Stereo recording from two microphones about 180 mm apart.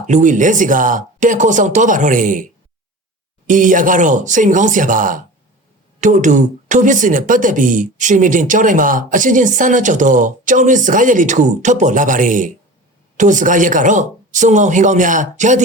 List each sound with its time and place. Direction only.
0.1 s speech: 45° right (ahead or behind)